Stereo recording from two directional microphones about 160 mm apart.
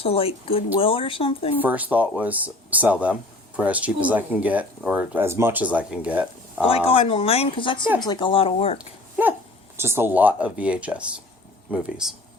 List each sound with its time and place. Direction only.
0.0 s speech: 35° left (ahead or behind)
1.6 s speech: 10° right (ahead or behind)
6.7 s speech: 35° left (ahead or behind)
9.7 s speech: 15° right (ahead or behind)